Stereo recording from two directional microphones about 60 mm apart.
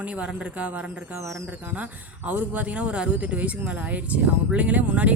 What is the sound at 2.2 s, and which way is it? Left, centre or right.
Speech, right.